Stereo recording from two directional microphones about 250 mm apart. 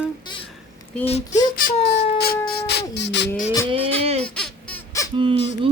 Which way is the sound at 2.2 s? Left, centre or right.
Left.